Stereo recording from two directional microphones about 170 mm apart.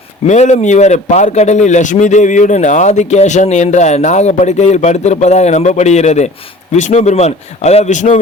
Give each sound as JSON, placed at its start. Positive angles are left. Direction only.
{"t": 0.3, "sound": "a man's voice", "side_deg": 40}